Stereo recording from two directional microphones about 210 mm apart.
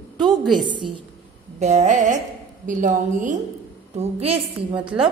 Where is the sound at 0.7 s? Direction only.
25° right (ahead or behind).